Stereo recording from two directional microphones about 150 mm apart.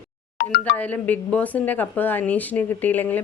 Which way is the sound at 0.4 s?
90° left.